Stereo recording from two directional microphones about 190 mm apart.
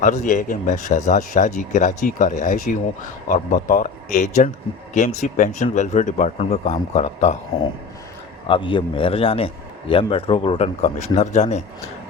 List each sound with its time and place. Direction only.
0.0 s speech: 40° left (ahead or behind)
8.4 s a man's voice: 25° left (ahead or behind)